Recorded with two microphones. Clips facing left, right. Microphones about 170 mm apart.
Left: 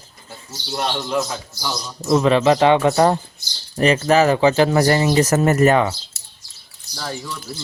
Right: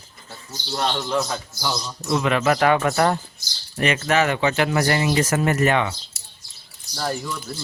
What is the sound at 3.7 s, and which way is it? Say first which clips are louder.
Speech: left 5 dB; 35° left (ahead or behind).